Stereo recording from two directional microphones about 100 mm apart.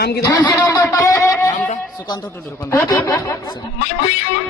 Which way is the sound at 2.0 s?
40° left (ahead or behind).